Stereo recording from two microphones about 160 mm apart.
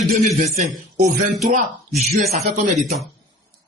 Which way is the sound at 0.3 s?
55° right (ahead or behind).